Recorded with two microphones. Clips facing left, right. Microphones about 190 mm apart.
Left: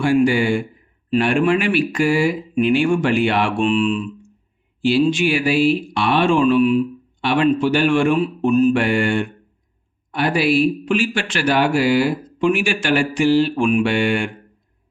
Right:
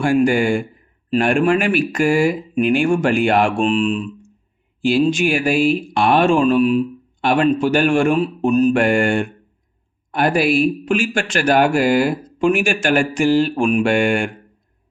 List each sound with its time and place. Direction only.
0.0 s speech: 45° right (ahead or behind)